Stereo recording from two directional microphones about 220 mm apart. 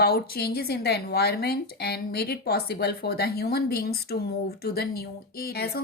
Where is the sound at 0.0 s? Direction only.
45° left (ahead or behind).